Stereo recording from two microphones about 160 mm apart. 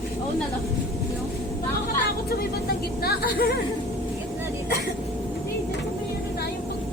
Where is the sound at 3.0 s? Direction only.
75° left (ahead or behind).